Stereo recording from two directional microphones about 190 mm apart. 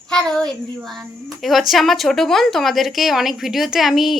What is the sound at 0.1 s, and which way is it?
A woman's voice, 5° left (ahead or behind).